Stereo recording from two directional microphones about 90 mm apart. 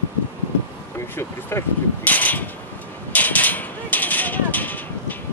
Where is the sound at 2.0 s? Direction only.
20° left (ahead or behind).